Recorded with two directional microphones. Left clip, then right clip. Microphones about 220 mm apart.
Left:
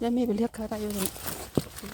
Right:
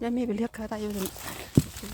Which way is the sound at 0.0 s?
10° left (ahead or behind).